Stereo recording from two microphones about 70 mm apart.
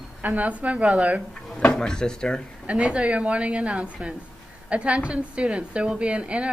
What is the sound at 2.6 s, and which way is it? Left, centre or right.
A woman's voice, centre.